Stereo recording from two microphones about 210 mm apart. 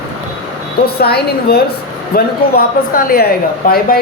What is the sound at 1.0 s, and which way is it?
Speech, 50° left (ahead or behind).